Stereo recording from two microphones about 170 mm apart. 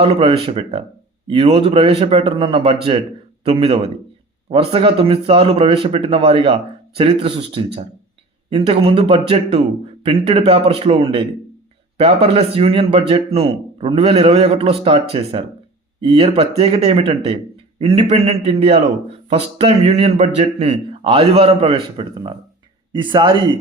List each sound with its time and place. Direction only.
0.0 s speech: 30° right (ahead or behind)